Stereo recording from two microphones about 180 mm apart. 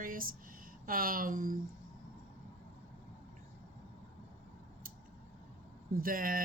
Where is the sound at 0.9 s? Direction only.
50° right (ahead or behind).